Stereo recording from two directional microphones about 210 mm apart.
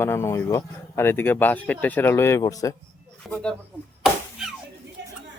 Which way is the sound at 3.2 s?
5° left (ahead or behind).